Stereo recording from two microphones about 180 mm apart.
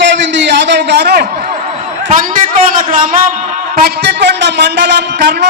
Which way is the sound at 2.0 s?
45° right (ahead or behind).